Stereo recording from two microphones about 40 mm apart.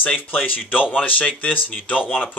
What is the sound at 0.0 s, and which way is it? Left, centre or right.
Speech, left.